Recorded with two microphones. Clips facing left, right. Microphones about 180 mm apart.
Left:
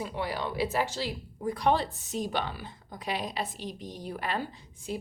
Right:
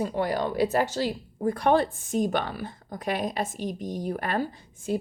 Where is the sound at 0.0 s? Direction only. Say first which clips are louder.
Right 7 dB; 45° right (ahead or behind).